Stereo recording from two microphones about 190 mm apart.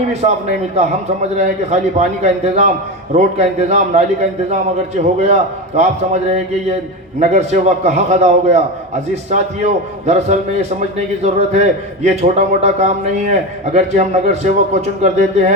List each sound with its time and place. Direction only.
0.1 s a man's voice: 35° right (ahead or behind)
1.4 s a man's voice: 35° right (ahead or behind)
5.2 s a man's voice: 35° right (ahead or behind)
7.2 s a man's voice: 35° right (ahead or behind)